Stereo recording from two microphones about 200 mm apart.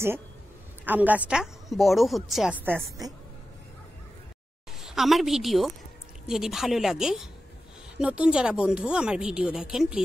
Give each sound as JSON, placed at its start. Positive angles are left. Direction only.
{"t": 0.8, "sound": "speech", "side_deg": -10}
{"t": 4.7, "sound": "a woman's voice", "side_deg": 0}